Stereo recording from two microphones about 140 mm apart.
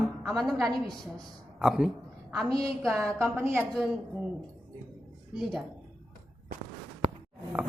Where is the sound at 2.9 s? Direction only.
15° right (ahead or behind).